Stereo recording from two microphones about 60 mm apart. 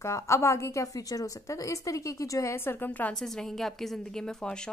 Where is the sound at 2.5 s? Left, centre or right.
Left.